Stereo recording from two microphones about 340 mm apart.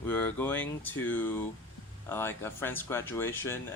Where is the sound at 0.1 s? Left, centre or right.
Centre.